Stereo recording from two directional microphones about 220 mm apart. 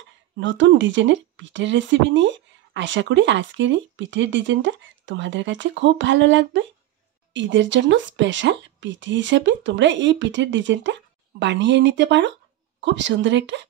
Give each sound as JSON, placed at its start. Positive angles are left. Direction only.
{"t": 0.4, "sound": "speech", "side_deg": -55}